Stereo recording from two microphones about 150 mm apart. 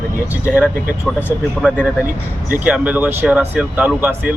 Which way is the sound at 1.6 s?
10° left (ahead or behind).